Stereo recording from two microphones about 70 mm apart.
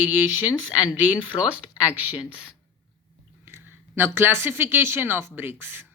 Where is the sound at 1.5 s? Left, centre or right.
Right.